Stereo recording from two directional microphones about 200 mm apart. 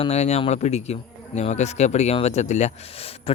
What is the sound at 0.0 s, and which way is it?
A man's voice, 35° left (ahead or behind).